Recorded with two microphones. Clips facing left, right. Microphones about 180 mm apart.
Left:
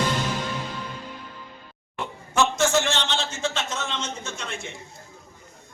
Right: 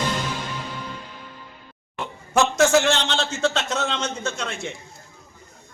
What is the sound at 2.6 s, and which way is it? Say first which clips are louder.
A man's voice: right 5 dB; 70° right (ahead or behind).